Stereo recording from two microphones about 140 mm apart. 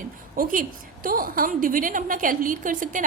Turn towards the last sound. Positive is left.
turn(degrees=-70)  # may be behind; listen again after turning